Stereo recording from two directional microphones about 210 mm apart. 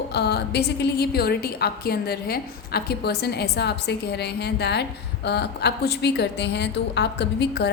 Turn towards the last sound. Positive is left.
turn(degrees=55)  # may be behind; listen again after turning